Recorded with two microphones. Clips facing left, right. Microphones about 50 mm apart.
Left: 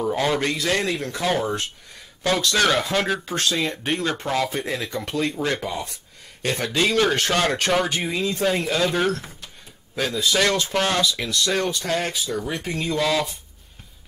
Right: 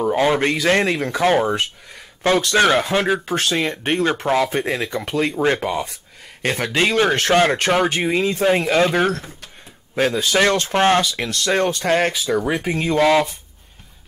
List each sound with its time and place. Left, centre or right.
0.0 s speech: right
0.5 s speech: right
1.2 s speech: right
7.0 s speech: right
7.9 s speech: right
9.0 s speech: right
9.9 s speech: right
11.1 s speech: right